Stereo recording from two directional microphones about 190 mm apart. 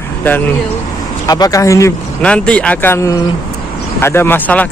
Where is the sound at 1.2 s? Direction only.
20° left (ahead or behind).